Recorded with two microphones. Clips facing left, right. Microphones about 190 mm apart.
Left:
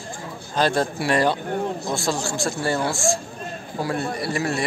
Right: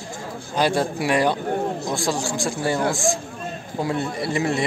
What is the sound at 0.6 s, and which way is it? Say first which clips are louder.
A man's voice: even; 10° right (ahead or behind).